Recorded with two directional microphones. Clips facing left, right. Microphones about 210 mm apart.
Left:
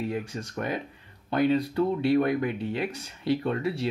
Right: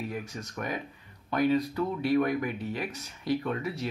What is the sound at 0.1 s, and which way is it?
Speech, 30° left (ahead or behind).